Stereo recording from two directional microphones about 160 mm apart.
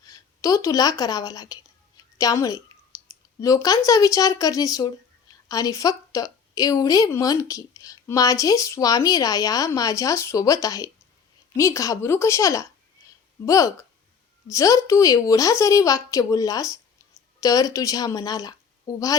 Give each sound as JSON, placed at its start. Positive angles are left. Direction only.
{"t": 0.0, "sound": "a woman's voice", "side_deg": 20}
{"t": 2.9, "sound": "clicking", "side_deg": 20}
{"t": 3.4, "sound": "a woman's voice", "side_deg": 20}